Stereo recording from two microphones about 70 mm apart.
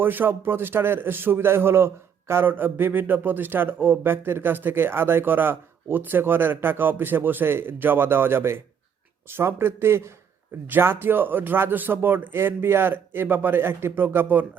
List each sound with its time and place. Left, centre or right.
0.0 s a man's voice: right